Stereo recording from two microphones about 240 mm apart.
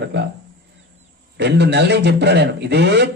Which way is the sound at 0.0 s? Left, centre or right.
Right.